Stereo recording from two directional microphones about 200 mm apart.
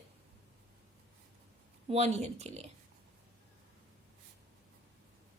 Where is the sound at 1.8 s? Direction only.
30° right (ahead or behind).